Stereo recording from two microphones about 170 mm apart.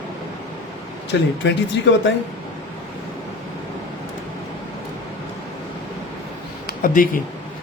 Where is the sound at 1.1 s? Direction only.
90° left.